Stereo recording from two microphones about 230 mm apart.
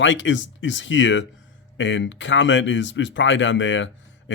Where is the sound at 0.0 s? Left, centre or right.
Left.